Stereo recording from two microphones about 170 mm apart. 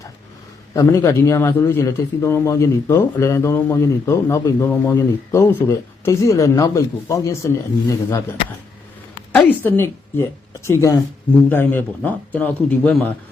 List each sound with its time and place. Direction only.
0.7 s a man's voice: 20° left (ahead or behind)
9.5 s a man's voice: 10° left (ahead or behind)